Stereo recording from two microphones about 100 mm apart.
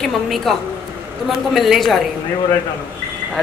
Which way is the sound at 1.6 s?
Centre (ahead or behind).